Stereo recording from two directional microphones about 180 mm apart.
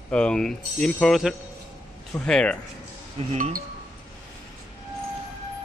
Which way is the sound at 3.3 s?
45° right (ahead or behind).